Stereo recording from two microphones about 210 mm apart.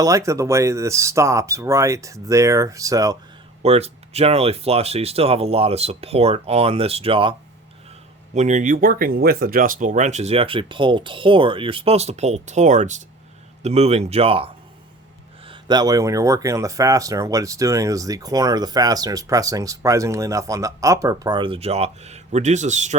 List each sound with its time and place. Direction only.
0.0 s speech: 15° right (ahead or behind)
3.6 s speech: 30° right (ahead or behind)
8.4 s speech: 35° right (ahead or behind)